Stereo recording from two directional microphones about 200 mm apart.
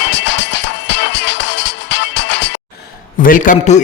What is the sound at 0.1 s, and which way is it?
Music, 60° left (ahead or behind).